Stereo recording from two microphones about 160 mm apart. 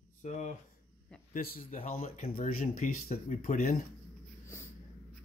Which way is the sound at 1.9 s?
45° left (ahead or behind).